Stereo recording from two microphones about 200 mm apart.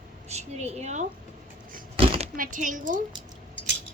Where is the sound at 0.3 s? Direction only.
35° right (ahead or behind).